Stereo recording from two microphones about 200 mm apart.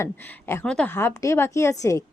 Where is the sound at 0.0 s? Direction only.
10° left (ahead or behind).